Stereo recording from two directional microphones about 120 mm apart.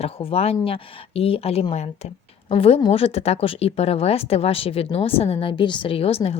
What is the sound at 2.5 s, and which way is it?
Speech, 55° left (ahead or behind).